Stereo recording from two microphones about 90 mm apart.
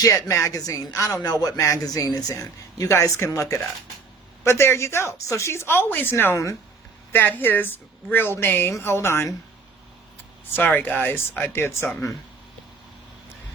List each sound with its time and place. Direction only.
0.0 s speech: 40° left (ahead or behind)
7.1 s speech: 20° left (ahead or behind)
10.6 s speech: 20° left (ahead or behind)